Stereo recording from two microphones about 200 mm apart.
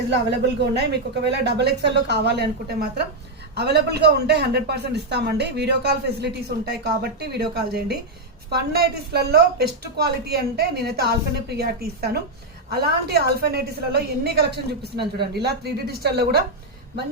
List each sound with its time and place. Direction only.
0.1 s a man's voice: 60° right (ahead or behind)